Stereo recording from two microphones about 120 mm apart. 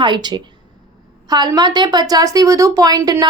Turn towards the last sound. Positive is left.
turn(degrees=-35)  # may be behind; listen again after turning